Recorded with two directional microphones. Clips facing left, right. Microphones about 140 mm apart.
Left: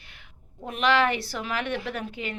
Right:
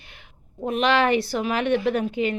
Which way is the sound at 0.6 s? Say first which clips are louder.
Right 3 dB; 20° right (ahead or behind).